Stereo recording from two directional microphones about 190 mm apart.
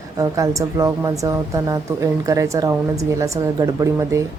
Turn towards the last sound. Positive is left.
turn(degrees=-15)  # may be behind; listen again after turning